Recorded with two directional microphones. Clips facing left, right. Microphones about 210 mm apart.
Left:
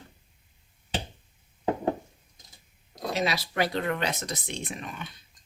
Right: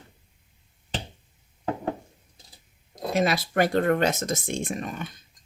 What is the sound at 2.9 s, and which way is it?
Speech, 50° right (ahead or behind).